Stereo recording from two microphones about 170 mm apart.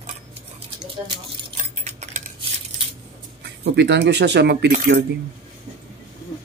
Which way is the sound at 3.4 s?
80° right.